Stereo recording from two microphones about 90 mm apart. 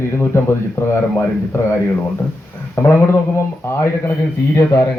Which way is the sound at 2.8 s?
30° left (ahead or behind).